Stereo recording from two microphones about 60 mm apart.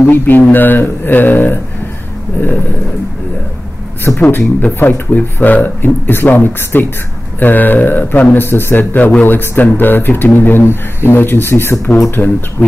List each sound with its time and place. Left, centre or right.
0.1 s speech: left
4.1 s speech: centre
4.6 s speech: left
12.2 s speech: left